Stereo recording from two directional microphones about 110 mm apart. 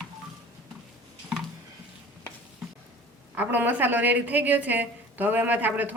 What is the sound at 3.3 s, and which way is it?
A woman's voice, 15° right (ahead or behind).